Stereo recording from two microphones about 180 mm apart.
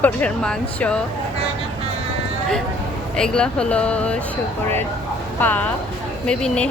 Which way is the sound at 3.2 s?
5° left (ahead or behind).